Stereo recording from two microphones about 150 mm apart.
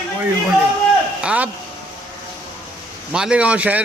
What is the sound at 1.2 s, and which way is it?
Speech, 10° right (ahead or behind).